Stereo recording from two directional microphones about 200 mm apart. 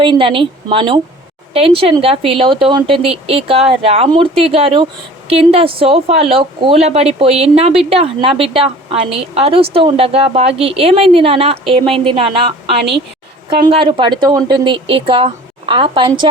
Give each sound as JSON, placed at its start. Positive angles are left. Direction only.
{"t": 0.0, "sound": "a woman's voice", "side_deg": -25}
{"t": 13.9, "sound": "a woman's voice", "side_deg": -25}